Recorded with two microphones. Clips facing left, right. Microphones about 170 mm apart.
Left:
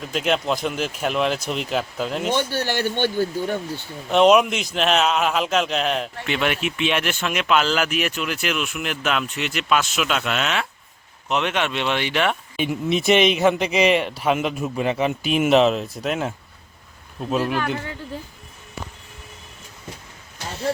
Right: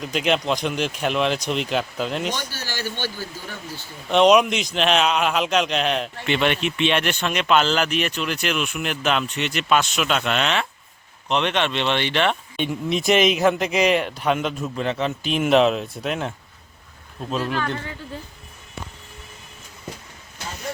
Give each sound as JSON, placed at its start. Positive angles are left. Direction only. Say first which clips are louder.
{"t": 0.0, "sound": "speech", "louder": "even", "side_deg": 0}
{"t": 2.5, "sound": "speech", "louder": "left 7 dB", "side_deg": 60}
{"t": 4.1, "sound": "speech", "louder": "even", "side_deg": 5}